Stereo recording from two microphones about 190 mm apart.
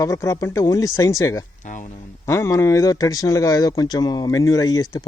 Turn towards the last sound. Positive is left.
turn(degrees=20)  # may be behind; listen again after turning